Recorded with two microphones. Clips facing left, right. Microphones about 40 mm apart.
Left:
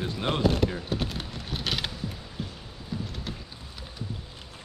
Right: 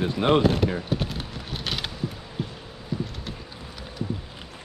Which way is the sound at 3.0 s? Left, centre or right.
Centre.